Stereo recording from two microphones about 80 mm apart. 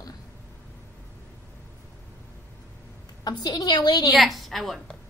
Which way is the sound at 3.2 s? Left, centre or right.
Left.